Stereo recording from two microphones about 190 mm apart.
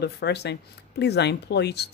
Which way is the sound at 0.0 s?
60° left (ahead or behind).